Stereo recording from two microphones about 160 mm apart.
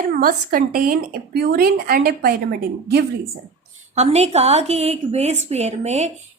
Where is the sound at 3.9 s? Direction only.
45° right (ahead or behind).